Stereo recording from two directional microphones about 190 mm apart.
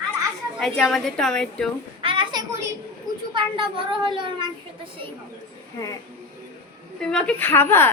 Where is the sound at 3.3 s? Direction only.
25° right (ahead or behind).